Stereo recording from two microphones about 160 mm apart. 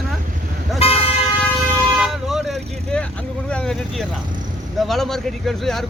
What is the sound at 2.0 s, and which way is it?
Speech, centre (ahead or behind).